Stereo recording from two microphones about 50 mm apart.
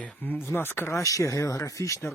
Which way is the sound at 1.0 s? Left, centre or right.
Left.